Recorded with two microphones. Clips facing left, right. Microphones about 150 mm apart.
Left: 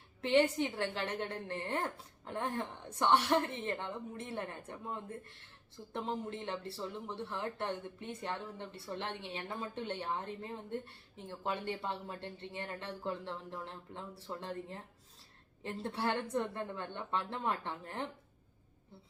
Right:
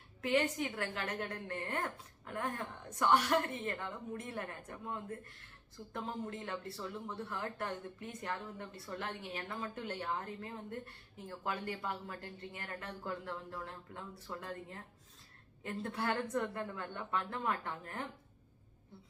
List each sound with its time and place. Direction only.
0.2 s speech: 25° left (ahead or behind)